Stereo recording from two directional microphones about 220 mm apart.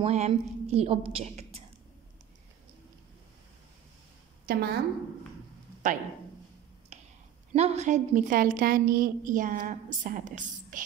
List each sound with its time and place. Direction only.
0.0 s a woman's voice: 30° right (ahead or behind)
4.5 s a woman's voice: 45° right (ahead or behind)
5.8 s a woman's voice: 35° right (ahead or behind)
6.9 s a sound: 30° right (ahead or behind)
7.5 s a woman's voice: 30° right (ahead or behind)